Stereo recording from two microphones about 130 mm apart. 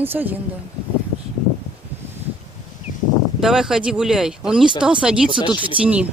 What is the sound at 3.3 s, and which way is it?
Speech, 5° right (ahead or behind).